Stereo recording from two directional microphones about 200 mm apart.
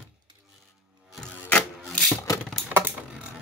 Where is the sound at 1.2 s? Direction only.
5° left (ahead or behind).